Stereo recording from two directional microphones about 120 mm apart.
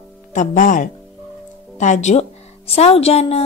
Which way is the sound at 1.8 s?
75° left (ahead or behind).